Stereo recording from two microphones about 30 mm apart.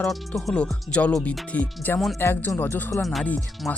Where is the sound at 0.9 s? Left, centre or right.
Left.